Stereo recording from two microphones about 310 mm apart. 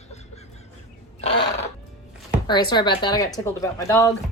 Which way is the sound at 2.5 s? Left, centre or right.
Centre.